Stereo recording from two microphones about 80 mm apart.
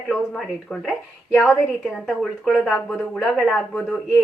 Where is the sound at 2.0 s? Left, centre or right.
Centre.